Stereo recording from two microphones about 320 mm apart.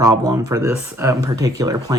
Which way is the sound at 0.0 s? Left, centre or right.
Centre.